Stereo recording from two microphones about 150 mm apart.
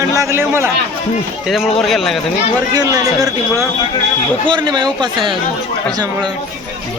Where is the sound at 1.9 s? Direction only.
Centre (ahead or behind).